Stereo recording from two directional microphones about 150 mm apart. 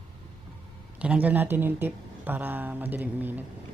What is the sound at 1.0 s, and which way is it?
Speech, 10° right (ahead or behind).